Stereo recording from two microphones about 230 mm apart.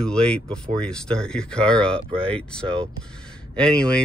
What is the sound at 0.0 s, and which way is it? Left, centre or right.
Speech, centre.